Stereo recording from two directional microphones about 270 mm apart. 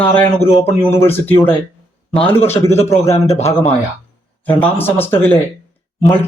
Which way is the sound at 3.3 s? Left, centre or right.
Left.